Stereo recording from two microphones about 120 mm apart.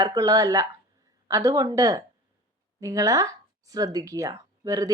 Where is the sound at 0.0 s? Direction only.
30° right (ahead or behind).